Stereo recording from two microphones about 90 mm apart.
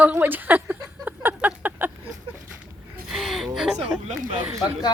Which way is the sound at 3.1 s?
Centre (ahead or behind).